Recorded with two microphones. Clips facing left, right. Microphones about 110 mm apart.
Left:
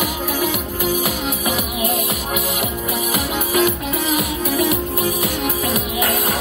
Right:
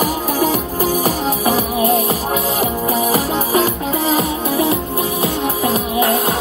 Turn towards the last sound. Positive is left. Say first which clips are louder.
# right 5 dB
turn(degrees=-30)  # may be behind; listen again after turning